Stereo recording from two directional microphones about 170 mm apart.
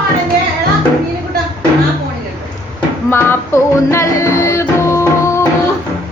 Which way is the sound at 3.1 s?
15° left (ahead or behind).